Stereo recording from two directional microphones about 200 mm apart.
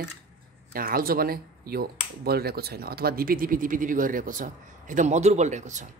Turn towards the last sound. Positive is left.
turn(degrees=-35)  # may be behind; listen again after turning